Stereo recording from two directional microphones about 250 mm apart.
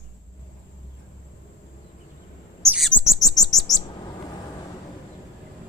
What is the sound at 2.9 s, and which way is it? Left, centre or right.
Bird, centre.